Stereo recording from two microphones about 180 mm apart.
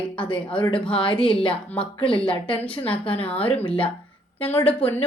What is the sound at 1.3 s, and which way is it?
Speech, 30° left (ahead or behind).